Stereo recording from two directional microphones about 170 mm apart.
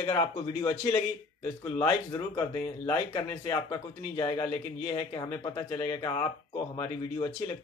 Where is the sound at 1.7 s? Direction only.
20° left (ahead or behind).